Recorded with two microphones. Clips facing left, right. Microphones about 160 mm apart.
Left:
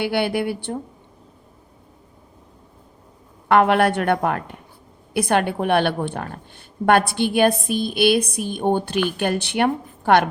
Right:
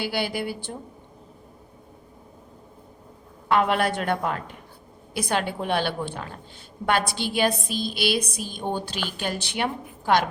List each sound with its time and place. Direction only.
0.0 s a woman's voice: 60° left (ahead or behind)
3.5 s a woman's voice: 60° left (ahead or behind)